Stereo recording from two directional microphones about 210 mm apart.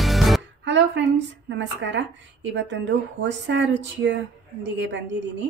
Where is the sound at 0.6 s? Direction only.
60° right (ahead or behind).